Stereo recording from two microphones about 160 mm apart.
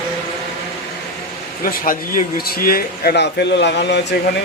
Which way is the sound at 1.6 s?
60° left (ahead or behind).